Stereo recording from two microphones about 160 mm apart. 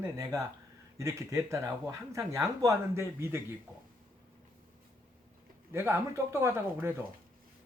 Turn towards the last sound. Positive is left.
turn(degrees=-15)  # may be behind; listen again after turning